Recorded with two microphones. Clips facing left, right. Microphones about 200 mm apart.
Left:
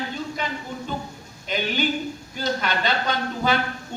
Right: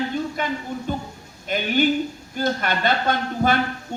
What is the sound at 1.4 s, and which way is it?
A man's voice, 50° right (ahead or behind).